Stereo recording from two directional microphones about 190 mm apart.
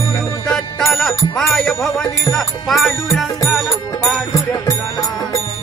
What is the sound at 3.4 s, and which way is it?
Music, centre (ahead or behind).